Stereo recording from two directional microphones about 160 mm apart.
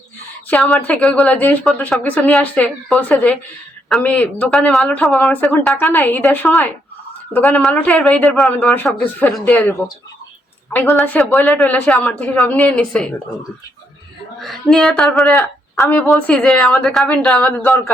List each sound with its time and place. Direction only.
0.5 s a woman's voice: centre (ahead or behind)
14.4 s a woman's voice: centre (ahead or behind)
15.4 s a woman's voice: 15° left (ahead or behind)